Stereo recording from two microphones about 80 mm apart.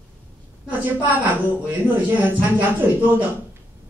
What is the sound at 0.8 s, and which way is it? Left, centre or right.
A woman's voice, right.